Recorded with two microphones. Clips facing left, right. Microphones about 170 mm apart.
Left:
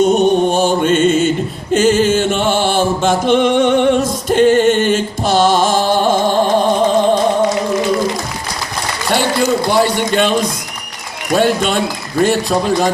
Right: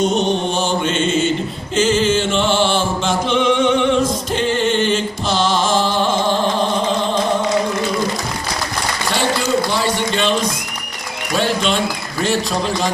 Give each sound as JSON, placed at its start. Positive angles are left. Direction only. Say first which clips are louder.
{"t": 0.0, "sound": "mantra", "louder": "left 6 dB", "side_deg": 55}
{"t": 1.7, "sound": "music", "louder": "left 4 dB", "side_deg": 50}
{"t": 9.7, "sound": "a sound", "louder": "left 5 dB", "side_deg": 55}
{"t": 11.3, "sound": "a man's voice", "louder": "left 4 dB", "side_deg": 50}